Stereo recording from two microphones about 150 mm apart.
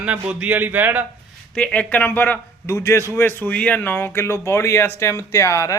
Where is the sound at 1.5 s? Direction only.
5° left (ahead or behind).